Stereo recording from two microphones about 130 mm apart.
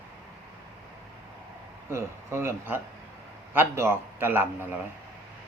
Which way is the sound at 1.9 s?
20° right (ahead or behind).